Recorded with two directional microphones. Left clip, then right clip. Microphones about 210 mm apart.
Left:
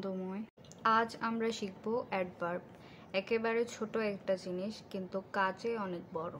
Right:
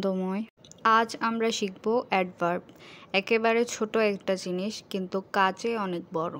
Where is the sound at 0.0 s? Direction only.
45° right (ahead or behind).